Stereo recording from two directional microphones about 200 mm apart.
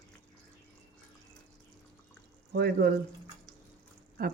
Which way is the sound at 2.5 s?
55° right (ahead or behind).